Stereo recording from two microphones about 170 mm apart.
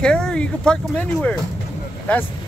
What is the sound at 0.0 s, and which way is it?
Speech, 5° left (ahead or behind).